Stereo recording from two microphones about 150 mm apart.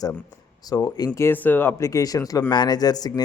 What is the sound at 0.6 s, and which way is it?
Speech, 25° left (ahead or behind).